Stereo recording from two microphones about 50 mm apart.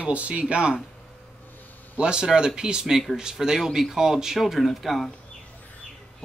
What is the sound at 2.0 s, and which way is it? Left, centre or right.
Speech, centre.